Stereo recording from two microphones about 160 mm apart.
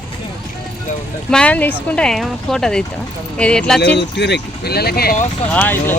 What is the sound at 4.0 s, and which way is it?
Speech, 90° left.